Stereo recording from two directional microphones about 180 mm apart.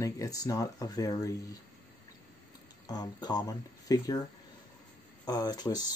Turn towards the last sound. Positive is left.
turn(degrees=20)  # may be behind; listen again after turning